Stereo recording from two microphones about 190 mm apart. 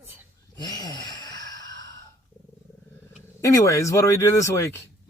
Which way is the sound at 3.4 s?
15° left (ahead or behind).